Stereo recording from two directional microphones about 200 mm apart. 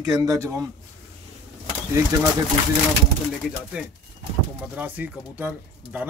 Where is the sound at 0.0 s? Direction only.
15° right (ahead or behind).